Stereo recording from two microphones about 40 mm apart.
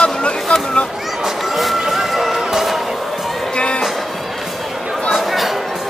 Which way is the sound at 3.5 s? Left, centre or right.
Left.